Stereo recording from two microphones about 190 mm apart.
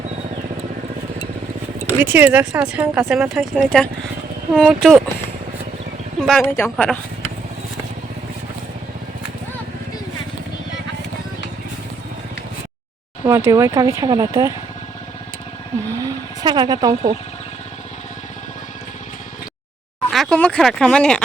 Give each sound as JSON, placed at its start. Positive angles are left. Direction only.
{"t": 1.9, "sound": "speech", "side_deg": -10}
{"t": 6.1, "sound": "a woman's voice", "side_deg": 5}
{"t": 13.2, "sound": "speech", "side_deg": -15}
{"t": 16.0, "sound": "vehicle", "side_deg": -20}
{"t": 20.1, "sound": "speech", "side_deg": 5}